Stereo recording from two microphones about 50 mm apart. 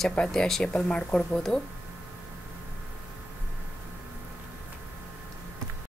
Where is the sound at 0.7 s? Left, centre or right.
Centre.